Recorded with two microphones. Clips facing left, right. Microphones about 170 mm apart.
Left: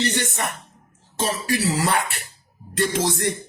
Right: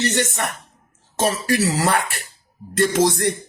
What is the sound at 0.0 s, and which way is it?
Speech, 50° right (ahead or behind).